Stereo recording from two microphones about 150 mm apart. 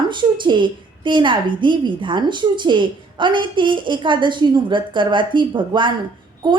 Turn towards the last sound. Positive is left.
turn(degrees=-35)  # may be behind; listen again after turning